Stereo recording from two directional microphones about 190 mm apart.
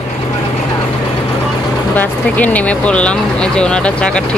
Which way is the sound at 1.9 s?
10° left (ahead or behind).